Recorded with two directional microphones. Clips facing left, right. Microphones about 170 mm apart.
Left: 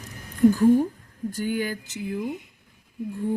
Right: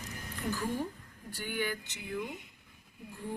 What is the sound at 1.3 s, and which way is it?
Speech, 40° left (ahead or behind).